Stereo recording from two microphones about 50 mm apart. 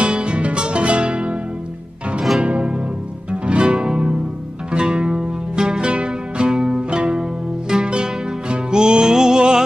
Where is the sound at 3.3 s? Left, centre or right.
Right.